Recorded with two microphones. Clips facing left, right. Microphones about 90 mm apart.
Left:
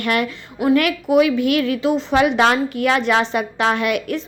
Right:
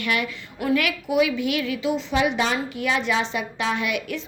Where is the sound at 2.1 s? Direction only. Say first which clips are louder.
Left 8 dB; 60° left (ahead or behind).